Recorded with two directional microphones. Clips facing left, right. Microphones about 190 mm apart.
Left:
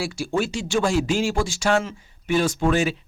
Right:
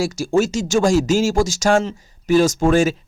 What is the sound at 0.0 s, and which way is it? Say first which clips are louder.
Speech: right 7 dB; 45° right (ahead or behind).